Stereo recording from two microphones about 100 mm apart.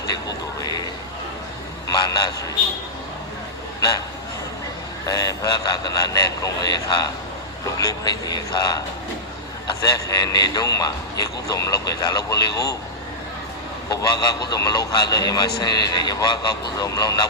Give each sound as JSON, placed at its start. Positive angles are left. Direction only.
{"t": 1.9, "sound": "a man's voice", "side_deg": 40}
{"t": 3.8, "sound": "a man's voice", "side_deg": 40}
{"t": 5.0, "sound": "a man's voice", "side_deg": 40}
{"t": 13.9, "sound": "a man's voice", "side_deg": 40}